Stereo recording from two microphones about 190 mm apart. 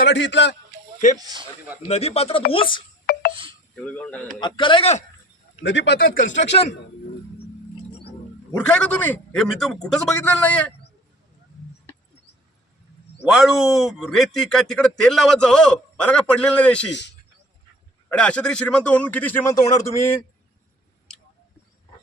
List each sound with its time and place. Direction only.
0.1 s a man's voice: 70° left (ahead or behind)
1.2 s speech: 20° right (ahead or behind)
1.9 s a man's voice: 35° left (ahead or behind)
3.1 s a sound: 55° left (ahead or behind)
3.8 s a man's voice: 5° left (ahead or behind)
4.4 s a man's voice: 25° left (ahead or behind)
5.6 s speech: 70° left (ahead or behind)
8.5 s a man's voice: 5° left (ahead or behind)
13.2 s a man's voice: centre (ahead or behind)
16.9 s speech: 65° left (ahead or behind)
18.1 s a man's voice: 5° left (ahead or behind)